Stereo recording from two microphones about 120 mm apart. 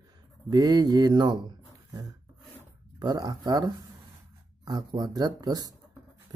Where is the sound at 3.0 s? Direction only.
35° right (ahead or behind).